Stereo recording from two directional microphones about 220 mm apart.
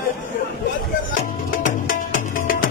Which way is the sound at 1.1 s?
35° left (ahead or behind).